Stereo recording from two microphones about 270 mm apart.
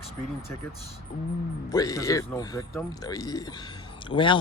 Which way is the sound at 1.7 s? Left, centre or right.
Centre.